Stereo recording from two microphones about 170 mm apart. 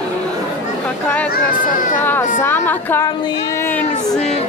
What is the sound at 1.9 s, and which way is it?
Speech, 10° left (ahead or behind).